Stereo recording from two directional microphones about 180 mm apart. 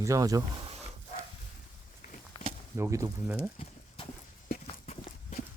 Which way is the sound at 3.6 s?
30° left (ahead or behind).